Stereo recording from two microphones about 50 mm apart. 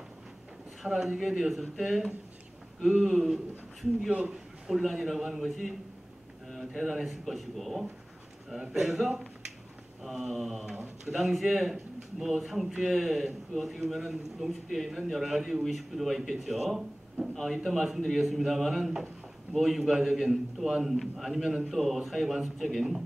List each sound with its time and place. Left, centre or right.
0.8 s a man's voice: centre
4.1 s a man's voice: centre
4.6 s a man's voice: centre